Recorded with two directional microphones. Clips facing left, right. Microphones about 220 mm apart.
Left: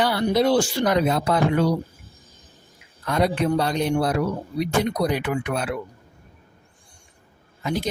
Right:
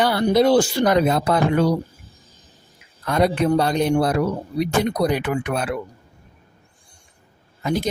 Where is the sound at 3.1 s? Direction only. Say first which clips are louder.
Right 3 dB; 50° right (ahead or behind).